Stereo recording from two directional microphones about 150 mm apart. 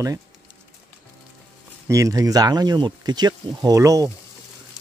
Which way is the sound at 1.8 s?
20° right (ahead or behind).